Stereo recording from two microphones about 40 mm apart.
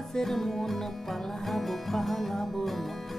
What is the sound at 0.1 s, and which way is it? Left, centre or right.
Music, centre.